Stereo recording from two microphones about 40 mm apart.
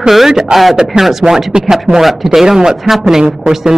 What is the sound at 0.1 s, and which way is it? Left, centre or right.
Speech, centre.